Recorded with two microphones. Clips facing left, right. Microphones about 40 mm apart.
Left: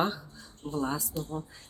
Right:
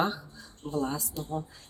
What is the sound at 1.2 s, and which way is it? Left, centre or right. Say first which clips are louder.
Speech: right 1 dB; centre.